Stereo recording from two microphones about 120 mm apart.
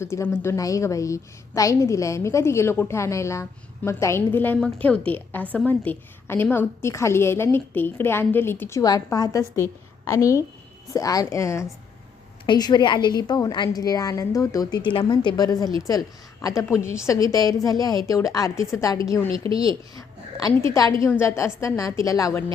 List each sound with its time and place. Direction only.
0.0 s a woman's voice: 20° left (ahead or behind)
8.8 s a woman's voice: 30° left (ahead or behind)
12.5 s a woman's voice: 35° left (ahead or behind)